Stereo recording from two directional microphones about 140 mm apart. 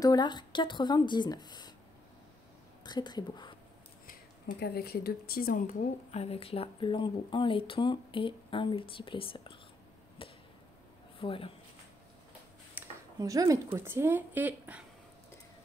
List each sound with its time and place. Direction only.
0.0 s speech: 30° left (ahead or behind)
2.8 s a woman's voice: 30° left (ahead or behind)
4.8 s speech: 90° left; by 5.9 s 75° left (ahead or behind)
6.1 s speech: 45° left (ahead or behind)
11.1 s speech: 40° left (ahead or behind)
12.8 s a sound: 10° right (ahead or behind)
13.2 s a woman's voice: 25° right (ahead or behind)